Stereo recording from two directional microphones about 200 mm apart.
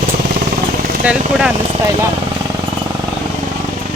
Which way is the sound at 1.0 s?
5° right (ahead or behind).